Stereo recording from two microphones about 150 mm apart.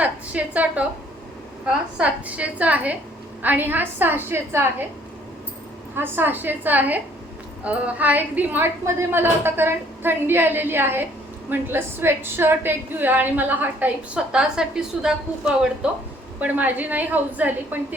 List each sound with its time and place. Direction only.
0.0 s a woman's voice: 10° right (ahead or behind)
6.0 s a woman's voice: 15° right (ahead or behind)